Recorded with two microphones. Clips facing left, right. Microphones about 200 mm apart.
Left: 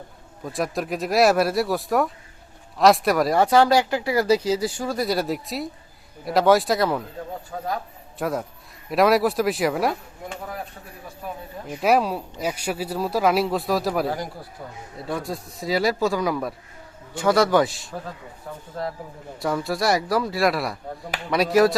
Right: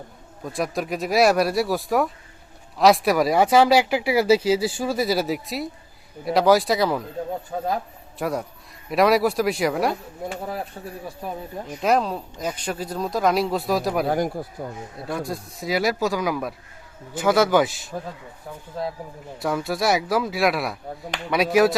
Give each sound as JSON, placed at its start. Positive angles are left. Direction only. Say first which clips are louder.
{"t": 0.4, "sound": "speech", "louder": "even", "side_deg": 0}
{"t": 8.2, "sound": "speech", "louder": "even", "side_deg": 0}
{"t": 10.8, "sound": "speech", "louder": "right 8 dB", "side_deg": -30}
{"t": 11.8, "sound": "speech", "louder": "left 1 dB", "side_deg": 10}
{"t": 14.1, "sound": "speech", "louder": "right 6 dB", "side_deg": -50}
{"t": 15.1, "sound": "speech", "louder": "even", "side_deg": 0}
{"t": 19.4, "sound": "speech", "louder": "even", "side_deg": 0}